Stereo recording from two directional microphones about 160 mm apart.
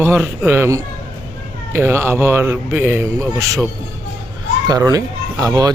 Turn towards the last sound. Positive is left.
turn(degrees=-25)  # may be behind; listen again after turning